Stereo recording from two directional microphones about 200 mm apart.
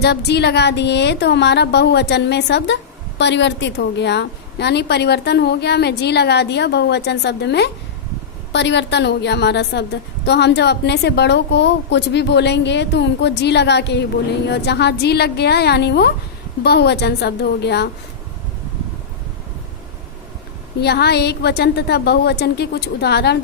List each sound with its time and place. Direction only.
0.0 s a woman's voice: 55° left (ahead or behind)
20.8 s a woman's voice: 55° left (ahead or behind)